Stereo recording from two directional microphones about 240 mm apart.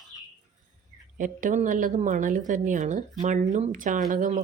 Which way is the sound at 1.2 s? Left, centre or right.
Right.